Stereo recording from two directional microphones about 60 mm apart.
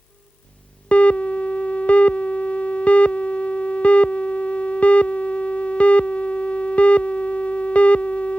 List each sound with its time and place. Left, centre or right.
0.9 s busy signal: left